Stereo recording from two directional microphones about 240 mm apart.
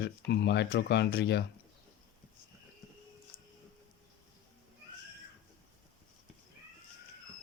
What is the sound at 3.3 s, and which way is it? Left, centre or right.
Music, left.